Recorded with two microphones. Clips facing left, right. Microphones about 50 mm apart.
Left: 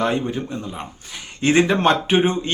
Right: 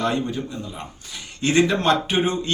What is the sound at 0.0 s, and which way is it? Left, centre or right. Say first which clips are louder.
A man's voice: left 2 dB; left.